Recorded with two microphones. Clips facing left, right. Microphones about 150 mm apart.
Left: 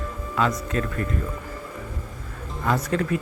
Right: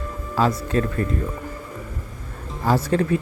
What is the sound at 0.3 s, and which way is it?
Speech, 35° right (ahead or behind).